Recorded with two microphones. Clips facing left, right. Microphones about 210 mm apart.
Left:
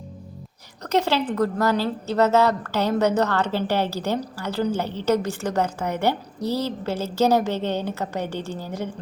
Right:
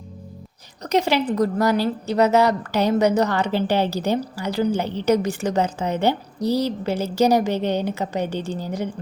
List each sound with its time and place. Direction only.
0.8 s a woman's voice: 15° right (ahead or behind)